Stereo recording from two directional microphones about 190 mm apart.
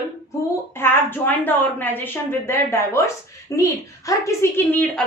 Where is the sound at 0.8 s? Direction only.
10° left (ahead or behind).